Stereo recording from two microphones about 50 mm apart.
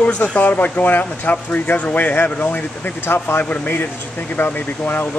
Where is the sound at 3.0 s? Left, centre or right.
Left.